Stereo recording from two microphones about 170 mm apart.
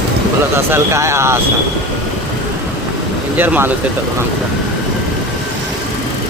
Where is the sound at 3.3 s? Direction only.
10° right (ahead or behind).